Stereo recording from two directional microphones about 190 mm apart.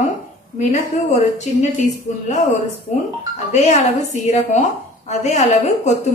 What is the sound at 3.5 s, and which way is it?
Speech, 35° left (ahead or behind).